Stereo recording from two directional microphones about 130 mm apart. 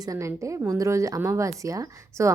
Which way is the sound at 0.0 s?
25° right (ahead or behind).